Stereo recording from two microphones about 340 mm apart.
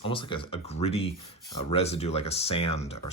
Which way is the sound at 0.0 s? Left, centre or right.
Centre.